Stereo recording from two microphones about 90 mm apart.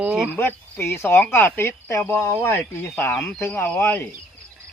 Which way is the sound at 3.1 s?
5° left (ahead or behind).